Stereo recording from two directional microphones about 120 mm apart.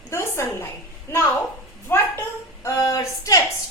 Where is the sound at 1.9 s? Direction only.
20° left (ahead or behind).